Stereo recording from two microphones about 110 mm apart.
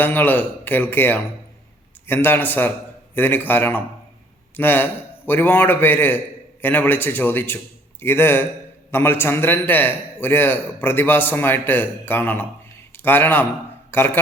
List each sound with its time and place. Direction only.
0.0 s a man's voice: 15° left (ahead or behind)